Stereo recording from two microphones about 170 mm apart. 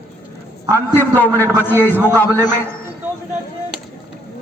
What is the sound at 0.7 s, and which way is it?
A man's voice, 15° left (ahead or behind).